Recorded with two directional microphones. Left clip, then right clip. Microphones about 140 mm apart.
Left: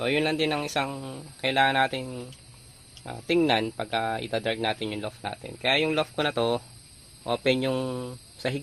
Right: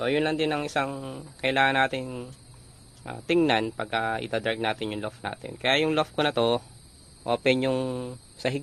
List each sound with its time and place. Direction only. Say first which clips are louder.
0.0 s speech: even; centre (ahead or behind); by 8.6 s 15° right (ahead or behind)